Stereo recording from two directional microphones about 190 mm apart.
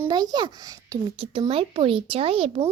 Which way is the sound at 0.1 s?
20° right (ahead or behind).